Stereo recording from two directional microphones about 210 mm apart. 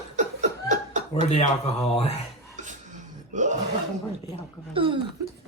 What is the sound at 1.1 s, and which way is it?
Speech, 30° left (ahead or behind).